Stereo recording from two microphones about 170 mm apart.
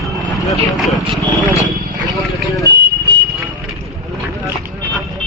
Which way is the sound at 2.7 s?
80° right.